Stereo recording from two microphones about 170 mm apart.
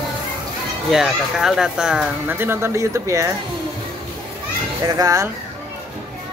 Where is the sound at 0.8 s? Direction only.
Centre (ahead or behind); by 3.3 s 20° right (ahead or behind).